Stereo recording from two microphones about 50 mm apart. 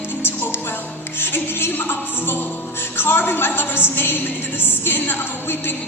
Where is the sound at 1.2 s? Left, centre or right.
Left.